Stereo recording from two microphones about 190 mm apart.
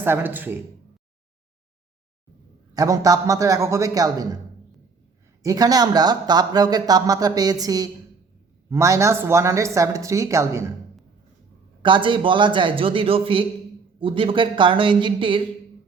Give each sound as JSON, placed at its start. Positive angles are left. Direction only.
{"t": 0.0, "sound": "speech", "side_deg": -10}
{"t": 2.7, "sound": "speech", "side_deg": -20}
{"t": 5.4, "sound": "speech", "side_deg": -20}
{"t": 11.8, "sound": "speech", "side_deg": -25}